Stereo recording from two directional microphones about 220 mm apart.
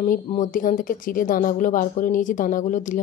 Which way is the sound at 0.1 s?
35° left (ahead or behind).